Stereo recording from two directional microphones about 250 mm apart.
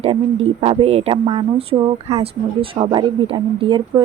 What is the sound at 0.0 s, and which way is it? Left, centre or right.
Speech, right.